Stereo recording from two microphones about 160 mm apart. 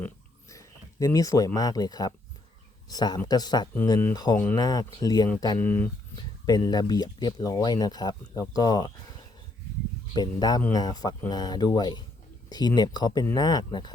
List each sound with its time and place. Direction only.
0.5 s speech: 20° left (ahead or behind)
5.5 s speech: 10° left (ahead or behind)
6.4 s speech: 25° left (ahead or behind)
10.2 s speech: 25° left (ahead or behind)